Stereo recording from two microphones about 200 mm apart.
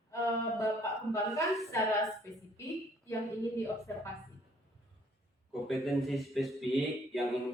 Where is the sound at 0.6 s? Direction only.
15° left (ahead or behind).